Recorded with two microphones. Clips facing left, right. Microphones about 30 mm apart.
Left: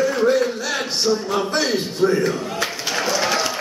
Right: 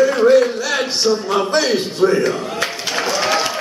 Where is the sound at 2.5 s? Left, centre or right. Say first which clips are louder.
Right 2 dB; centre.